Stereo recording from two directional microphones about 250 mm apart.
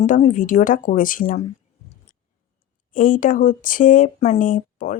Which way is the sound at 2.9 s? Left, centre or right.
Left.